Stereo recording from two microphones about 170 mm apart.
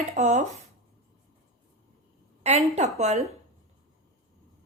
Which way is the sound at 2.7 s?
40° right (ahead or behind).